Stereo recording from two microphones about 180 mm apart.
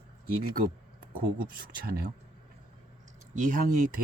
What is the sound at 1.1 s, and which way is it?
Speech, 55° right (ahead or behind).